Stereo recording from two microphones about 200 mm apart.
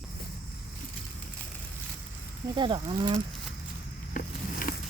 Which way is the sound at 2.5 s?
25° right (ahead or behind).